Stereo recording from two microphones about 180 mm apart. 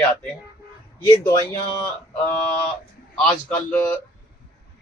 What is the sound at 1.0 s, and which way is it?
Speech, 20° left (ahead or behind).